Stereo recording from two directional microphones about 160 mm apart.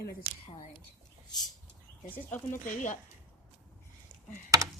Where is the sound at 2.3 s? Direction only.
50° left (ahead or behind).